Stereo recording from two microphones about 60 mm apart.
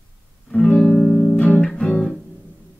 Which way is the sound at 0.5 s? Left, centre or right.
Centre.